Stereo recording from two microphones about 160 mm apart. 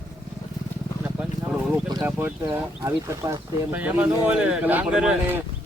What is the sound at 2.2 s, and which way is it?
Speech, 15° right (ahead or behind).